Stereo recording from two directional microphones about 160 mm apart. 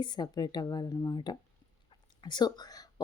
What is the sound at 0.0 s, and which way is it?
A woman's voice, 25° left (ahead or behind).